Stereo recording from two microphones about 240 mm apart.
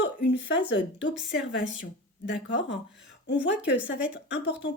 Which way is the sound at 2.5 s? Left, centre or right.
Left.